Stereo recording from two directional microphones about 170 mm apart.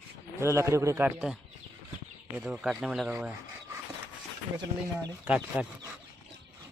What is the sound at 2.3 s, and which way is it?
Speech, 5° right (ahead or behind).